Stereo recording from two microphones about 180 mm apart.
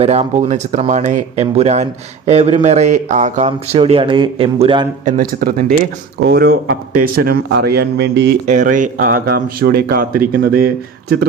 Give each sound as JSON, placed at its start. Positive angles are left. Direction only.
{"t": 0.0, "sound": "speech", "side_deg": -35}
{"t": 5.0, "sound": "speech", "side_deg": -50}
{"t": 8.4, "sound": "speech", "side_deg": -45}